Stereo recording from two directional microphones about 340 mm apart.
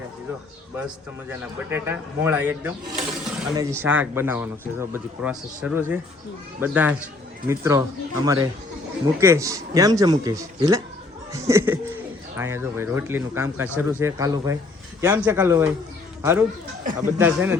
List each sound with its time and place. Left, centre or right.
1.3 s a man's voice: centre